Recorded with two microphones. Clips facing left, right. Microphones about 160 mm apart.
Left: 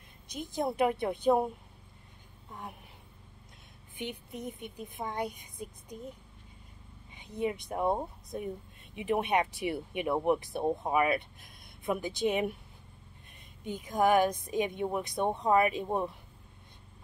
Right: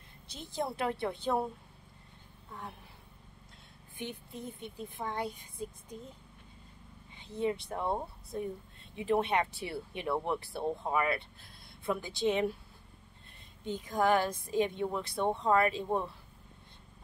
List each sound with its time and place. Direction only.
0.3 s speech: 15° left (ahead or behind)
3.9 s speech: 15° left (ahead or behind)
7.2 s speech: 15° left (ahead or behind)
13.7 s speech: 15° left (ahead or behind)